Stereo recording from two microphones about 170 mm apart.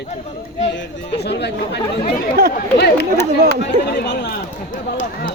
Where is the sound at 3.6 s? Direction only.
80° left.